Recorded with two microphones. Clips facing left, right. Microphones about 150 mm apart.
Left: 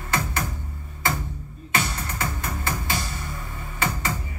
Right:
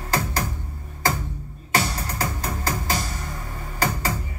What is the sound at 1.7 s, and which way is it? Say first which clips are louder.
Music: right 3 dB; 40° right (ahead or behind).